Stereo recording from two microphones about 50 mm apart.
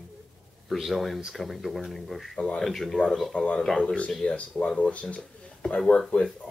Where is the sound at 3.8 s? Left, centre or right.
Left.